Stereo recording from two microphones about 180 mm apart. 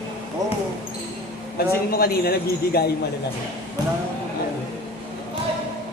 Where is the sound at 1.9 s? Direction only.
60° left (ahead or behind).